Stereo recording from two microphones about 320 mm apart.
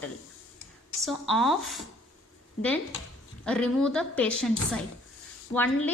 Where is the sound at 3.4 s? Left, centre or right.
Centre.